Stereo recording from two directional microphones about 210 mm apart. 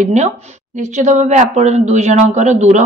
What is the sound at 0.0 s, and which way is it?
Speech, 35° right (ahead or behind).